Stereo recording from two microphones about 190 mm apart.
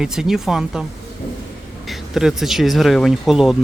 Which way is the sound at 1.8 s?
Centre (ahead or behind).